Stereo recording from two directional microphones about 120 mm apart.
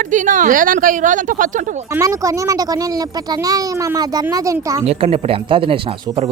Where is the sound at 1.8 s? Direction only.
25° right (ahead or behind).